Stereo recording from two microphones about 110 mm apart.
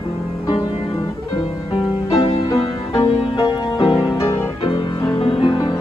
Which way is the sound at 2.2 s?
60° left (ahead or behind).